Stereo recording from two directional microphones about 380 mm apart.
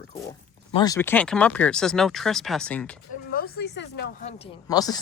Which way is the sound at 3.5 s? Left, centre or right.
Left.